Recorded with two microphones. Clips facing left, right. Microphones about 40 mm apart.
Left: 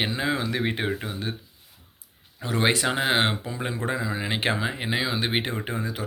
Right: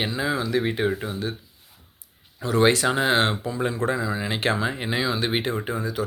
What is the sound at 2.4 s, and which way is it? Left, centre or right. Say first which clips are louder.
Speech: right 4 dB; left.